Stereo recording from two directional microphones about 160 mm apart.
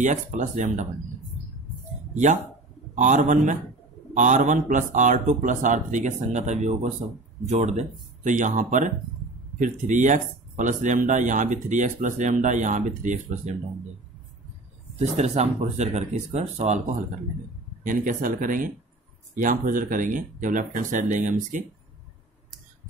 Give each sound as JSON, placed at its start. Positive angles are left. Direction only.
{"t": 0.0, "sound": "speech", "side_deg": -50}
{"t": 2.1, "sound": "speech", "side_deg": -50}
{"t": 15.0, "sound": "speech", "side_deg": -45}
{"t": 17.8, "sound": "speech", "side_deg": -55}